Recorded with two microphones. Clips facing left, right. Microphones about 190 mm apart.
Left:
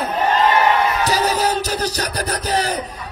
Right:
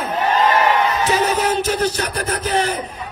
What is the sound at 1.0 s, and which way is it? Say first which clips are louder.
Music: right 1 dB; 40° left (ahead or behind).